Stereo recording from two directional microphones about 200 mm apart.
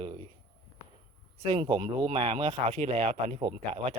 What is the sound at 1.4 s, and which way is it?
Speech, 25° right (ahead or behind).